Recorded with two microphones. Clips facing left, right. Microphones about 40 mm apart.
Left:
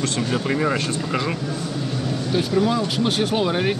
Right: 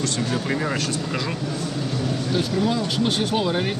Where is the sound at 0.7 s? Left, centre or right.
Left.